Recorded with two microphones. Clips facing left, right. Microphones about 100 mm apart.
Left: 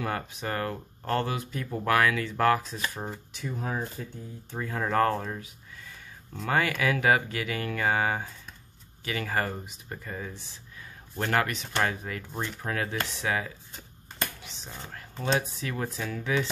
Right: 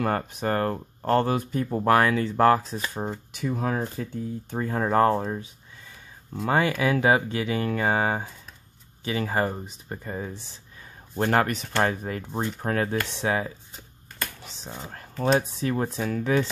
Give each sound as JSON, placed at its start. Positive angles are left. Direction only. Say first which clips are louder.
{"t": 0.0, "sound": "speech", "louder": "right 6 dB", "side_deg": -45}
{"t": 3.3, "sound": "speech", "louder": "right 6 dB", "side_deg": -65}
{"t": 4.6, "sound": "speech", "louder": "right 4 dB", "side_deg": -35}
{"t": 14.4, "sound": "a sound", "louder": "right 3 dB", "side_deg": -40}
{"t": 14.9, "sound": "speech", "louder": "right 6 dB", "side_deg": -40}